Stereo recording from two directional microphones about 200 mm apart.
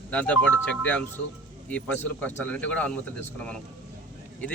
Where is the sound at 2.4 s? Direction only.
5° left (ahead or behind).